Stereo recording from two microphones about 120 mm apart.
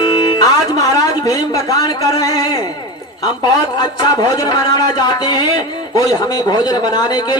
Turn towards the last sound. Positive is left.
turn(degrees=35)  # may be behind; listen again after turning